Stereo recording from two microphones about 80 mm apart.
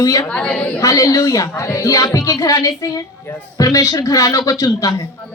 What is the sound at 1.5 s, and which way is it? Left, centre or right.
A woman's voice, left.